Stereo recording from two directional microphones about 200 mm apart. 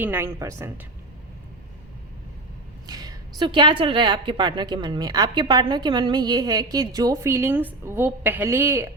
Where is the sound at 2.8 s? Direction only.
20° right (ahead or behind).